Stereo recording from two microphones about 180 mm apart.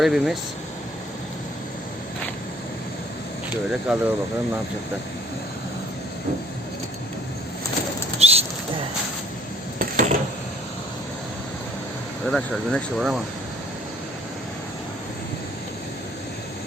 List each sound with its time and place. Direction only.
0.0 s speech: centre (ahead or behind)
3.7 s speech: 5° right (ahead or behind)
8.2 s bird flight: 35° right (ahead or behind)
9.7 s a sound: 45° right (ahead or behind)
12.2 s speech: centre (ahead or behind)